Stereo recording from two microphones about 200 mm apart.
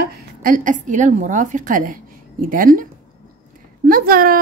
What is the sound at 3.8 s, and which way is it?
Speech, 45° right (ahead or behind).